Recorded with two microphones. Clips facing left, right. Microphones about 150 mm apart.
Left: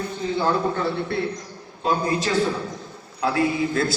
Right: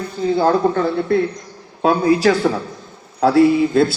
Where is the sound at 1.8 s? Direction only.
70° right (ahead or behind).